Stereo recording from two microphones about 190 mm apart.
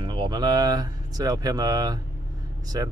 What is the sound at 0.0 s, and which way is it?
Speech, 25° right (ahead or behind).